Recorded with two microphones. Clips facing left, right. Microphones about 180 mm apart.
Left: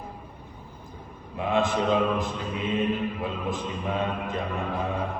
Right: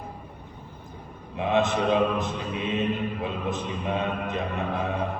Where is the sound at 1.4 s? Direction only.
20° right (ahead or behind).